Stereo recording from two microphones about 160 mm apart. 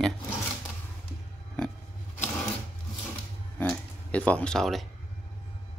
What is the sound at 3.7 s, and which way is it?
Speech, 10° left (ahead or behind).